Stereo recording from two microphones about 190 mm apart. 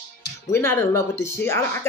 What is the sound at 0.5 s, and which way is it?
Speech, 10° left (ahead or behind).